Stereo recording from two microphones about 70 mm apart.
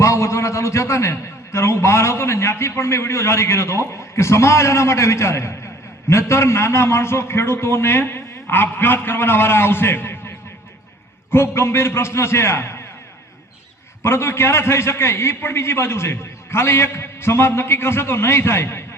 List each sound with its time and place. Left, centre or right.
0.0 s a man's voice: left
14.0 s a man's voice: left